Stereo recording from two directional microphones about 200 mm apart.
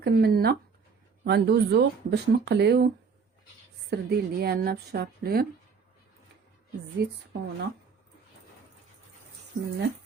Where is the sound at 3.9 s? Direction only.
50° right (ahead or behind).